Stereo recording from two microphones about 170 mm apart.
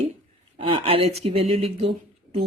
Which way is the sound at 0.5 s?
30° right (ahead or behind).